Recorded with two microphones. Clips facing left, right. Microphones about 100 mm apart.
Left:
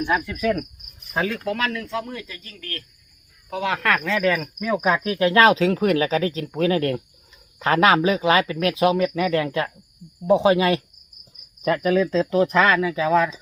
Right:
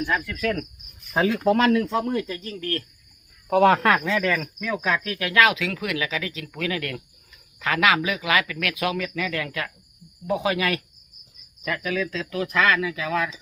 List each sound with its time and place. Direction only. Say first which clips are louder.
0.0 s speech: left 3 dB; 20° left (ahead or behind)
1.1 s speech: right 3 dB; 15° right (ahead or behind)
1.5 s speech: right 7 dB; 30° right (ahead or behind)
3.8 s speech: right 2 dB; 15° right (ahead or behind)
4.2 s cricket: left 3 dB; 10° left (ahead or behind)
4.7 s speech: left 5 dB; 20° left (ahead or behind)
5.3 s speech: left 4 dB; 35° left (ahead or behind)